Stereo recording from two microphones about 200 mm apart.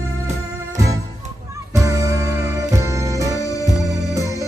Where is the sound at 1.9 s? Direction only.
15° right (ahead or behind).